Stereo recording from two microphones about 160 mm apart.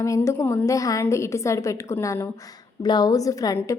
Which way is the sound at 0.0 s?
20° left (ahead or behind).